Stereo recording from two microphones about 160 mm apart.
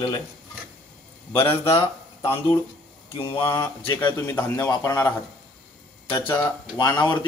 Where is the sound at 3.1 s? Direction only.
30° left (ahead or behind).